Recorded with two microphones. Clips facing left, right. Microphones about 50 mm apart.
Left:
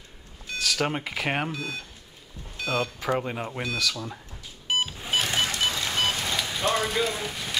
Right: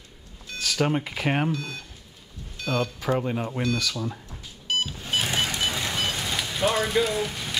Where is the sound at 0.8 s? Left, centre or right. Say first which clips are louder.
Right 2 dB; centre.